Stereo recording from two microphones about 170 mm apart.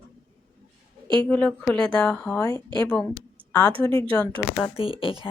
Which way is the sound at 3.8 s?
15° left (ahead or behind).